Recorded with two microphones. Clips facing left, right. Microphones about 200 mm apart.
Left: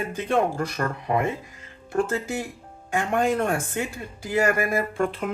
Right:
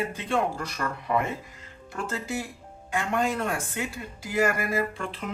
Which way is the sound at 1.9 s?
55° left (ahead or behind).